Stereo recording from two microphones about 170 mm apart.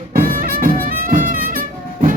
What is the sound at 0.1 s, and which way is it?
Music, 55° right (ahead or behind).